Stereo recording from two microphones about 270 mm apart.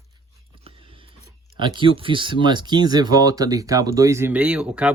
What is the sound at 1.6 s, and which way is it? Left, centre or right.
Speech, centre.